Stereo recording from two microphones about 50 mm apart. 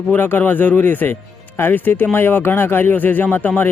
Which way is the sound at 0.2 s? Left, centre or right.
Left.